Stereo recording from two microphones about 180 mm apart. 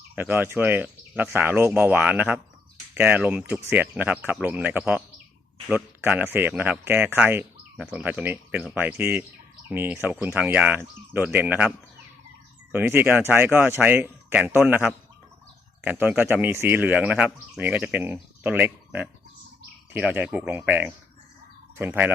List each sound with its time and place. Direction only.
0.2 s speech: 10° right (ahead or behind)
12.7 s speech: 10° right (ahead or behind)